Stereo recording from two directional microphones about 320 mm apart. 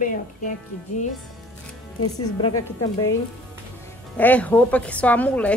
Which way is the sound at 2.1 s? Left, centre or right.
Centre.